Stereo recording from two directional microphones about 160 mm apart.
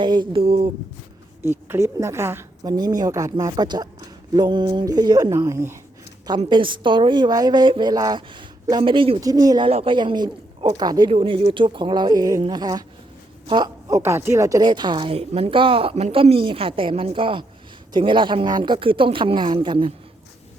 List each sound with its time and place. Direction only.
0.0 s a woman's voice: 30° right (ahead or behind)
1.4 s a woman's voice: 15° right (ahead or behind)
6.4 s a woman's voice: 30° right (ahead or behind)
9.6 s a woman's voice: 35° right (ahead or behind)